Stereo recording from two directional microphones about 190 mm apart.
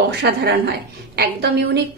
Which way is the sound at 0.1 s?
60° right (ahead or behind).